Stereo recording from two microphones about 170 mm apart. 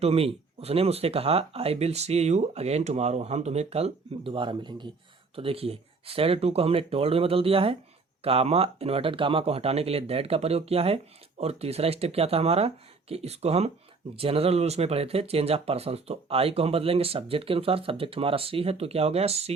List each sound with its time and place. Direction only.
0.0 s speech: 35° right (ahead or behind)